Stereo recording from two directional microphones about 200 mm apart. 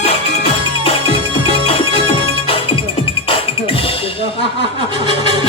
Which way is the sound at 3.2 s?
25° left (ahead or behind).